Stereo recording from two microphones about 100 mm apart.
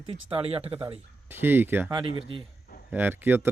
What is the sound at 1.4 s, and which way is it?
Speech, 20° right (ahead or behind).